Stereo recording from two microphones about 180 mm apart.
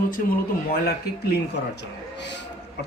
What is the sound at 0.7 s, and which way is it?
Speech, 65° left (ahead or behind).